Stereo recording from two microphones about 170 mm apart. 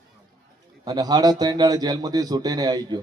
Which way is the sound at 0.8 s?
25° right (ahead or behind).